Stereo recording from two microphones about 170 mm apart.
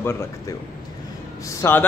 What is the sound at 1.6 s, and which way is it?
Speech, 15° left (ahead or behind).